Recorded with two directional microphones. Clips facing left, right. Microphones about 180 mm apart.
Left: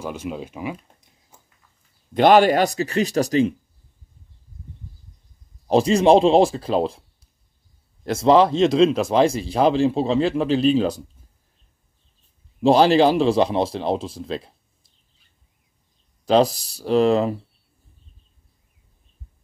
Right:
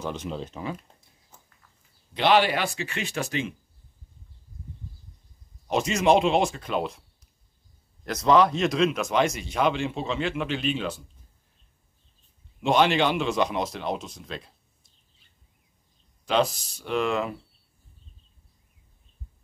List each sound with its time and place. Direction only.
0.0 s speech: 10° left (ahead or behind)
1.3 s horse: 10° left (ahead or behind)
2.1 s speech: 45° left (ahead or behind)
5.7 s speech: 30° left (ahead or behind)
12.6 s speech: 35° left (ahead or behind)
16.3 s speech: 35° left (ahead or behind)